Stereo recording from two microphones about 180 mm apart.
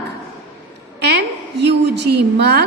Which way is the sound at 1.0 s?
65° right (ahead or behind).